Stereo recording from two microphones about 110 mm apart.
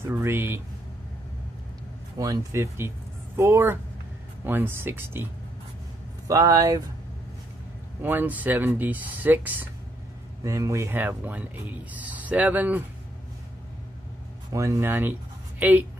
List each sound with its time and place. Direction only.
0.0 s speech: 20° right (ahead or behind)
2.1 s speech: 30° right (ahead or behind)
6.2 s speech: 30° right (ahead or behind)
8.0 s speech: 15° right (ahead or behind)
10.4 s speech: 30° right (ahead or behind)
14.5 s speech: 30° right (ahead or behind); by 15.8 s 15° right (ahead or behind)